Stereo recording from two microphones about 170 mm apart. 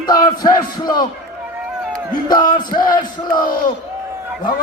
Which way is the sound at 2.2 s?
25° left (ahead or behind).